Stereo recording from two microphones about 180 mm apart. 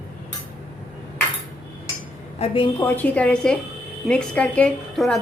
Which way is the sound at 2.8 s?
10° left (ahead or behind).